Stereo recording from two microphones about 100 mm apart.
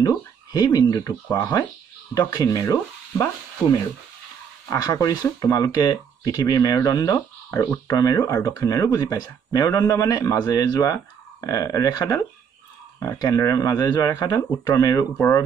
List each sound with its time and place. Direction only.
0.0 s speech: 35° left (ahead or behind)
4.6 s speech: 35° left (ahead or behind)
13.2 s speech: 35° left (ahead or behind)
15.1 s speech: 20° left (ahead or behind)